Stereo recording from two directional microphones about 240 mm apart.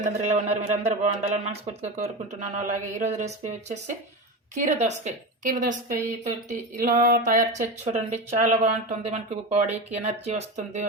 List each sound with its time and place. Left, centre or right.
0.0 s a man's voice: right